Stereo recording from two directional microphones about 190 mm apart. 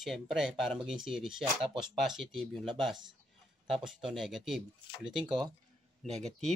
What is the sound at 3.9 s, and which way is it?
Speech, centre (ahead or behind).